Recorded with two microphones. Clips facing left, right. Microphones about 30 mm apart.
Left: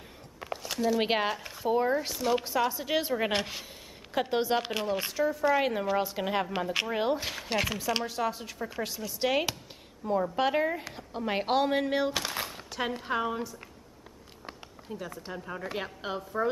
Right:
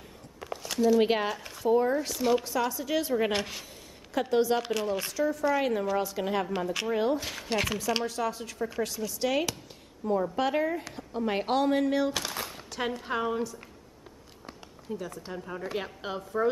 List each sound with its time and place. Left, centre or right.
0.4 s a sound: centre
0.9 s speech: centre
3.2 s speech: centre
4.1 s speech: left
12.4 s a sound: centre
13.0 s a woman's voice: centre
14.9 s speech: centre